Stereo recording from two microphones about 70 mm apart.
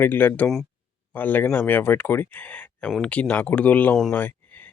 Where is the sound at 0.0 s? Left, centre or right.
Left.